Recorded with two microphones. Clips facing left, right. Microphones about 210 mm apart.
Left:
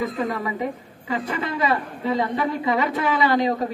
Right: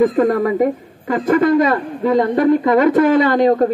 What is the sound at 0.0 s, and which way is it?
A man's voice, 50° right (ahead or behind).